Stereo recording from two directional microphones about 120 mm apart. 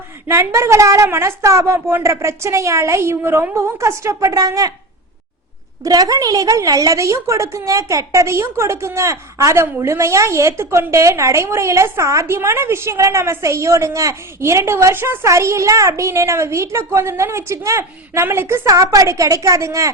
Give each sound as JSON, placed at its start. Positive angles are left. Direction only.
{"t": 0.3, "sound": "a woman's voice", "side_deg": -25}
{"t": 5.8, "sound": "a woman's voice", "side_deg": -30}